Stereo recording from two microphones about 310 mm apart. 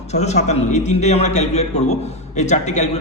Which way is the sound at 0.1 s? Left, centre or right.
Left.